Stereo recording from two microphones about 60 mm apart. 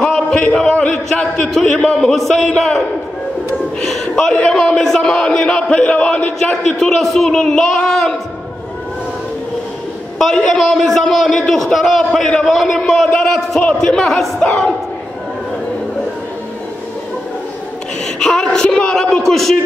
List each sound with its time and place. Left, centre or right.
0.0 s a man's voice: centre
3.8 s a man's voice: centre
10.1 s a man's voice: centre
18.0 s a man's voice: centre